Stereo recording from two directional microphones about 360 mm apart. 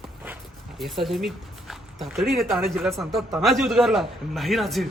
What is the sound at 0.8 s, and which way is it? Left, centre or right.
A man's voice, centre.